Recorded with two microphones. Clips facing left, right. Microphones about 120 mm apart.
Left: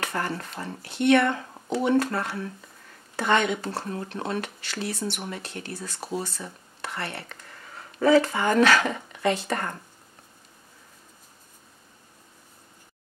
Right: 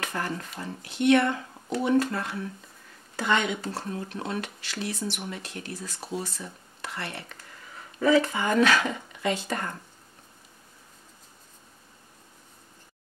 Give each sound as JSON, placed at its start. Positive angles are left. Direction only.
{"t": 0.0, "sound": "a sound", "side_deg": 60}
{"t": 0.6, "sound": "speech", "side_deg": 40}
{"t": 1.0, "sound": "speech", "side_deg": 55}
{"t": 5.7, "sound": "speech", "side_deg": 60}
{"t": 6.4, "sound": "a sound", "side_deg": 50}
{"t": 8.0, "sound": "speech", "side_deg": 35}
{"t": 8.3, "sound": "speech", "side_deg": 60}
{"t": 9.5, "sound": "speech", "side_deg": 50}